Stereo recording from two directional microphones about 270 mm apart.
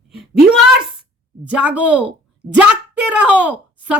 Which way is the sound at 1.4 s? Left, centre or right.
Centre.